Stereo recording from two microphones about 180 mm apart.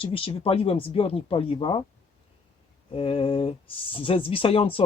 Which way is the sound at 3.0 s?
30° left (ahead or behind).